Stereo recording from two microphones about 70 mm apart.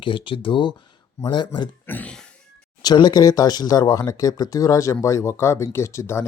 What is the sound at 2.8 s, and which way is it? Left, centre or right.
Speech, left.